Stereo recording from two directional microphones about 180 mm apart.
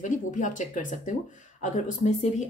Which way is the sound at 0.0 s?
45° left (ahead or behind).